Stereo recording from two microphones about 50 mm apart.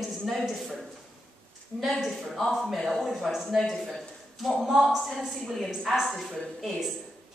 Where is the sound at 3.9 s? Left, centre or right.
Centre.